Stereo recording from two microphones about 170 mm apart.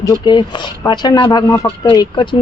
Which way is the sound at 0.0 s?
25° left (ahead or behind).